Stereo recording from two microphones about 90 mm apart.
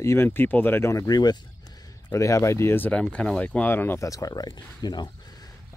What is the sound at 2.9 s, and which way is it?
Speech, 10° left (ahead or behind).